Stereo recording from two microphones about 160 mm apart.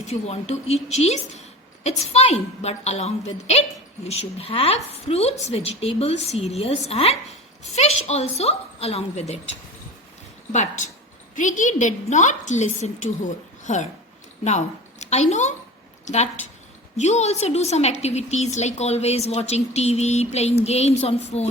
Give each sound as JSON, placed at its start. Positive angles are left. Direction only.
{"t": 0.1, "sound": "a woman's voice", "side_deg": 45}
{"t": 11.3, "sound": "a woman's voice", "side_deg": 55}